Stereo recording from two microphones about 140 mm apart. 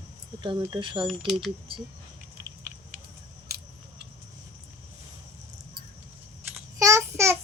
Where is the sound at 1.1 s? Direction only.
Centre (ahead or behind).